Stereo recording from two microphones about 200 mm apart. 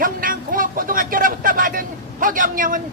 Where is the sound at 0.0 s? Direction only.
45° right (ahead or behind).